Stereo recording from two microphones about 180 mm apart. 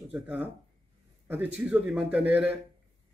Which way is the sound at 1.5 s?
5° right (ahead or behind).